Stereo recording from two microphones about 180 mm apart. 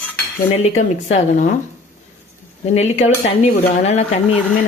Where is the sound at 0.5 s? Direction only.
35° left (ahead or behind).